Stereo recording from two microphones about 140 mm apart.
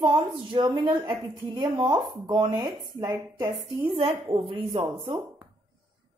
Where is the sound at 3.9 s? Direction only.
40° right (ahead or behind).